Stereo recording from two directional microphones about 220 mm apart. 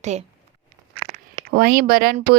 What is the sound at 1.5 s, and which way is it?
Speech, 40° right (ahead or behind).